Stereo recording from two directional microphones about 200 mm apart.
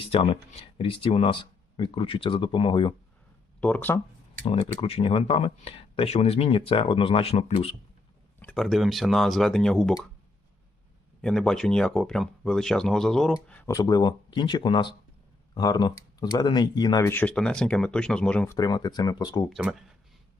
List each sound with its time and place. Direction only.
0.0 s speech: 30° left (ahead or behind)
3.6 s speech: 5° left (ahead or behind)
4.4 s speech: 30° left (ahead or behind)
8.4 s speech: 5° left (ahead or behind)
11.2 s speech: 5° left (ahead or behind)
13.7 s speech: 20° left (ahead or behind)
18.5 s speech: 20° left (ahead or behind)
19.5 s speech: centre (ahead or behind)